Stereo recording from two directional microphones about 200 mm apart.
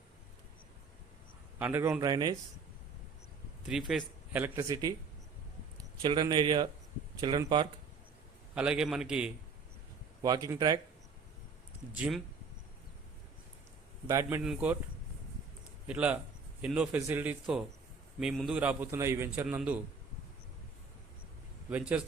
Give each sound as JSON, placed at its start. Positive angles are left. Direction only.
{"t": 1.5, "sound": "a man's voice", "side_deg": -10}
{"t": 3.7, "sound": "a man's voice", "side_deg": 0}
{"t": 6.0, "sound": "a man's voice", "side_deg": -20}
{"t": 8.5, "sound": "a man's voice", "side_deg": -5}
{"t": 10.2, "sound": "a man's voice", "side_deg": -20}
{"t": 11.9, "sound": "a man's voice", "side_deg": -5}
{"t": 14.1, "sound": "a man's voice", "side_deg": -15}
{"t": 15.9, "sound": "a man's voice", "side_deg": -5}
{"t": 21.7, "sound": "a man's voice", "side_deg": -5}